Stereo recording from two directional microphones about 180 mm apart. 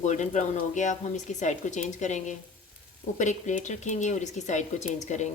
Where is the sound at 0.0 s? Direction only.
40° left (ahead or behind).